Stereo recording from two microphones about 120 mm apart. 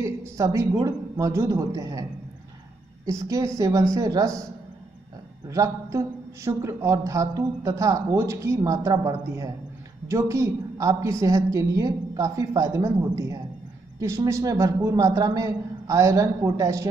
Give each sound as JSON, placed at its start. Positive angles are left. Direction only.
{"t": 0.0, "sound": "a woman's voice", "side_deg": -25}
{"t": 3.1, "sound": "a woman's voice", "side_deg": -25}
{"t": 5.5, "sound": "a woman's voice", "side_deg": -25}